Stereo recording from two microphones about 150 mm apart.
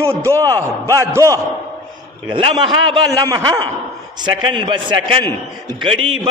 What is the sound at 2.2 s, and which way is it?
Speech, 35° right (ahead or behind).